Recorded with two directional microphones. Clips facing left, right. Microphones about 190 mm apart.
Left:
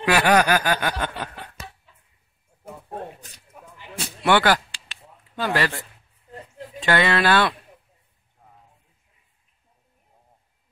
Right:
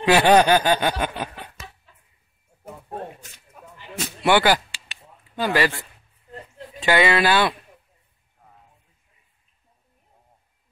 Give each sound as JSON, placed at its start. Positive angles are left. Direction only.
{"t": 0.0, "sound": "speech", "side_deg": -25}
{"t": 4.2, "sound": "a sound", "side_deg": -5}
{"t": 6.8, "sound": "speech", "side_deg": -5}